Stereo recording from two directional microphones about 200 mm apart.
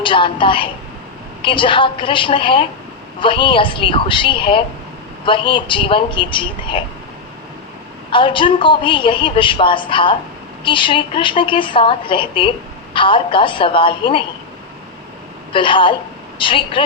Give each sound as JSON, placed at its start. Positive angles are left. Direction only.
{"t": 0.0, "sound": "a woman's voice", "side_deg": 25}
{"t": 8.1, "sound": "a woman's voice", "side_deg": 25}
{"t": 15.5, "sound": "a woman's voice", "side_deg": 25}